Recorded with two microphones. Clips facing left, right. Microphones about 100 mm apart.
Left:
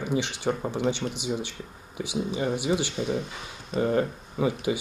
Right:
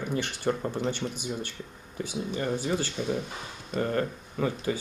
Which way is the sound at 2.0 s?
10° left (ahead or behind).